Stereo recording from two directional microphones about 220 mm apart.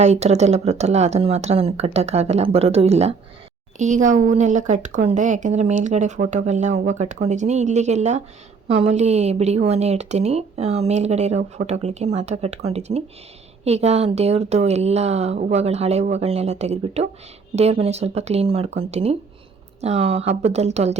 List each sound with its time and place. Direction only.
0.0 s a woman's voice: 30° right (ahead or behind)